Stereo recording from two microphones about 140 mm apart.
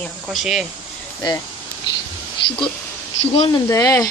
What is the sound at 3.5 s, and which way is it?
Speech, 25° left (ahead or behind).